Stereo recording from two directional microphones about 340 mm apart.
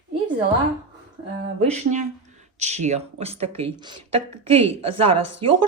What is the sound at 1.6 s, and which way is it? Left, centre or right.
Speech, right.